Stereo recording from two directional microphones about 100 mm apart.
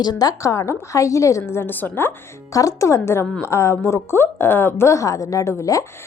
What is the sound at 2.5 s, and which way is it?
A woman's voice, 35° left (ahead or behind).